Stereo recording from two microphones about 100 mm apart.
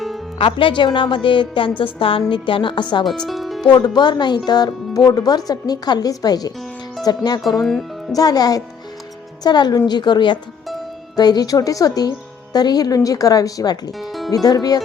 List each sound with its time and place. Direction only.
0.5 s a woman's voice: 55° left (ahead or behind)
3.1 s music: centre (ahead or behind)
3.7 s speech: 45° left (ahead or behind)
7.6 s speech: centre (ahead or behind)
8.1 s speech: 40° left (ahead or behind)
14.0 s music: centre (ahead or behind)
14.4 s speech: 40° left (ahead or behind)